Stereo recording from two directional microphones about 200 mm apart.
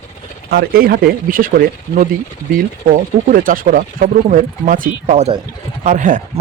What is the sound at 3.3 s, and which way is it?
Speech, 45° right (ahead or behind).